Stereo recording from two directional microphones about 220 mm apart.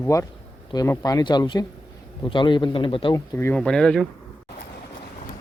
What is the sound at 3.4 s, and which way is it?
Speech, 5° left (ahead or behind).